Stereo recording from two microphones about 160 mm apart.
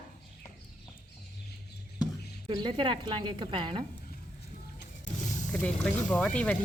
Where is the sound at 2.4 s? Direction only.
30° right (ahead or behind).